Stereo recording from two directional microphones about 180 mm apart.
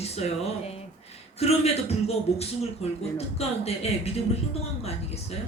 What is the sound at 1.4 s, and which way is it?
A woman's voice, 35° left (ahead or behind).